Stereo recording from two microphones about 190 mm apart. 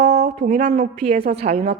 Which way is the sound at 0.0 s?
35° right (ahead or behind).